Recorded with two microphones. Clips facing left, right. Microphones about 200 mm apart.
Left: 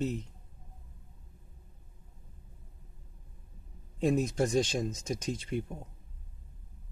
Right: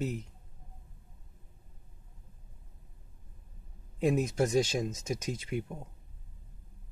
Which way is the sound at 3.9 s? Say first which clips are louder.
Even; 5° right (ahead or behind).